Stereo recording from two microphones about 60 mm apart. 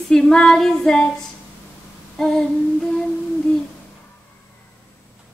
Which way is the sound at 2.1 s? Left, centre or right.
Centre.